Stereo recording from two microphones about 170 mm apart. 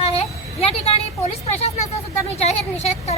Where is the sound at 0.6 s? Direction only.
35° left (ahead or behind).